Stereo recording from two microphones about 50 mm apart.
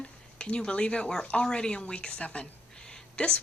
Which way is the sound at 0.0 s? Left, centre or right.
Left.